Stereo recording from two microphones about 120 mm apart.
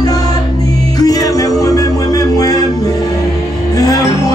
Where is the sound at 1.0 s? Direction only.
30° left (ahead or behind).